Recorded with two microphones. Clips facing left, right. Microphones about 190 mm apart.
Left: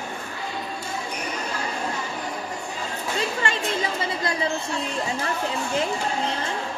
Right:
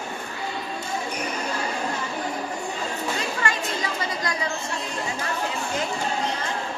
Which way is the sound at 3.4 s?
25° left (ahead or behind).